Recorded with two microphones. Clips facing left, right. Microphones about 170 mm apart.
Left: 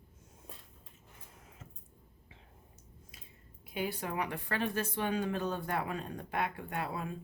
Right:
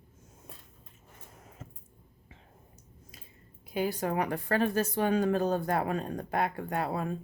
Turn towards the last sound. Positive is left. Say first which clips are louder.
# right 6 dB
turn(degrees=-45)  # may be behind; listen again after turning